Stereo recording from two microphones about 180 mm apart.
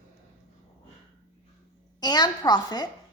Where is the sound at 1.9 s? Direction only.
20° left (ahead or behind).